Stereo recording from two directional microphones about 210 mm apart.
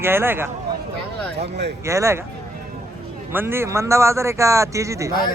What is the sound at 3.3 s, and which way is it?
Speech, 10° right (ahead or behind).